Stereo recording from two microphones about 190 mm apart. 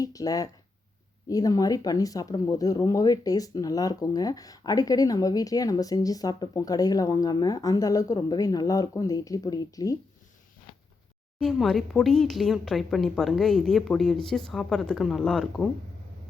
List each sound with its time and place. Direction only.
0.0 s speech: 20° left (ahead or behind)
11.3 s speech: centre (ahead or behind)